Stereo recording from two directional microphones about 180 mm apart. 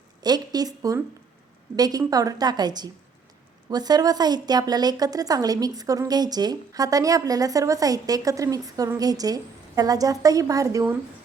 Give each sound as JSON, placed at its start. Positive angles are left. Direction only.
{"t": 0.2, "sound": "a woman's voice", "side_deg": -20}